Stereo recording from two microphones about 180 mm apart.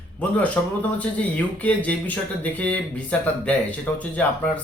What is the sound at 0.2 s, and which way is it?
Speech, 5° left (ahead or behind).